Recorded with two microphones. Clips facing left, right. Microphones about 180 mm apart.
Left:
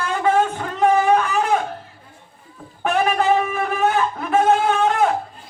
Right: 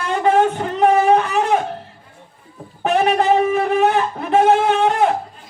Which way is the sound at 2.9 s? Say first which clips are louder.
Right 3 dB; 25° right (ahead or behind).